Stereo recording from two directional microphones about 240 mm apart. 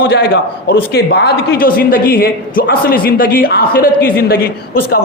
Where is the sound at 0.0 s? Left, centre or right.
Left.